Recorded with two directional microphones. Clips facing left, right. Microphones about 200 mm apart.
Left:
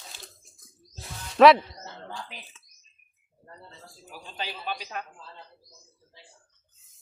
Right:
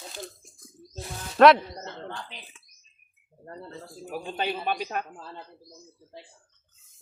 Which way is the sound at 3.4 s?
55° right (ahead or behind).